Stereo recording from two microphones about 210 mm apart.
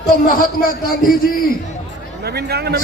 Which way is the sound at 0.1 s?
45° left (ahead or behind).